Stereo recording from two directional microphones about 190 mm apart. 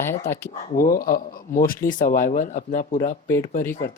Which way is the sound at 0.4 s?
50° left (ahead or behind).